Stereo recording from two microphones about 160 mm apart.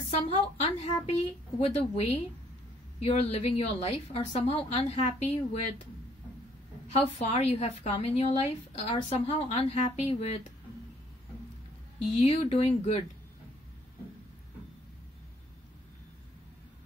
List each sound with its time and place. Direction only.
0.1 s a woman's voice: 40° left (ahead or behind)
6.9 s a woman's voice: 40° left (ahead or behind)
12.1 s a woman's voice: 40° left (ahead or behind)